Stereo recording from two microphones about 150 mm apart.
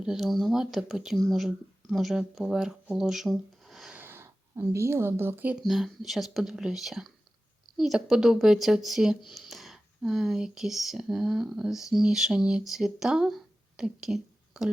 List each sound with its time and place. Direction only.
0.0 s speech: centre (ahead or behind)
4.0 s a sound: 15° right (ahead or behind)
4.7 s speech: 15° right (ahead or behind)
5.6 s speech: centre (ahead or behind)